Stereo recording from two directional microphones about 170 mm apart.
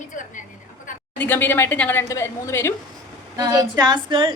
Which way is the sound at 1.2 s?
10° left (ahead or behind).